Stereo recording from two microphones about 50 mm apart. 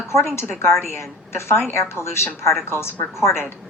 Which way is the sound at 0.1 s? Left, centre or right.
Left.